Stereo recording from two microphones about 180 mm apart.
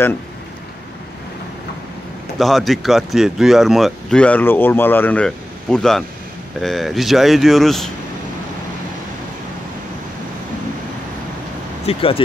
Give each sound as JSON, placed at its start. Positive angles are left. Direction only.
{"t": 2.3, "sound": "speech", "side_deg": 0}
{"t": 11.8, "sound": "speech", "side_deg": 35}